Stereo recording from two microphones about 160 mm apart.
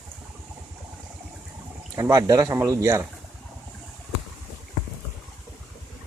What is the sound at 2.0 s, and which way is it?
Speech, 20° right (ahead or behind).